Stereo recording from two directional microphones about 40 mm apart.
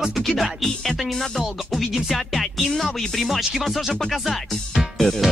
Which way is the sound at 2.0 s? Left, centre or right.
Centre.